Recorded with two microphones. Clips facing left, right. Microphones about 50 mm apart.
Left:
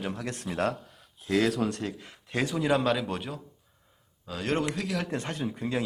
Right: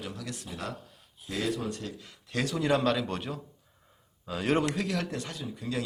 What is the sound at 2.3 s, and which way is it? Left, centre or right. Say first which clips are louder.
Speech: left 2 dB; centre.